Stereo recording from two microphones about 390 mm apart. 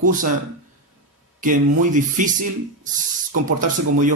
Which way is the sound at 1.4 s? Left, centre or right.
Centre.